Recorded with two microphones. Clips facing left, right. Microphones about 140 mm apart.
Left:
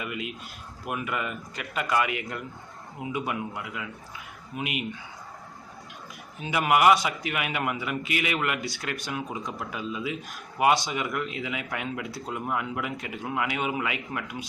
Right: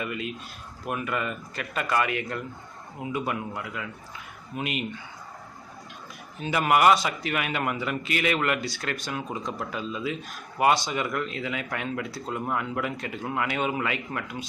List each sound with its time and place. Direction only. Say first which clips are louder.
0.0 s speech: right 2 dB; 15° left (ahead or behind)
6.4 s speech: right 1 dB; 10° left (ahead or behind)